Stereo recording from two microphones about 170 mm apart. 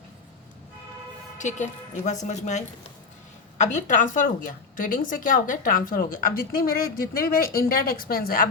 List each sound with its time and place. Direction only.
1.4 s a woman's voice: 45° left (ahead or behind)